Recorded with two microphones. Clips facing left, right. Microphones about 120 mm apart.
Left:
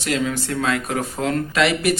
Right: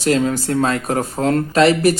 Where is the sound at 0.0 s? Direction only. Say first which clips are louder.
Right 6 dB; 40° right (ahead or behind).